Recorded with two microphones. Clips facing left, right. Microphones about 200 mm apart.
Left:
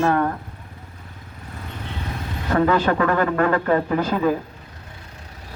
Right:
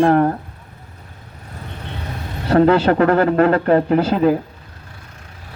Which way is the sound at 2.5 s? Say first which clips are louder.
Right 6 dB; 35° right (ahead or behind).